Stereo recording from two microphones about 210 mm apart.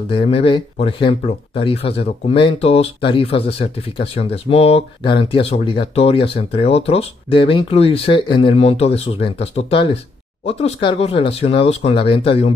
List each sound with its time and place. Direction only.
0.1 s speech: 25° left (ahead or behind)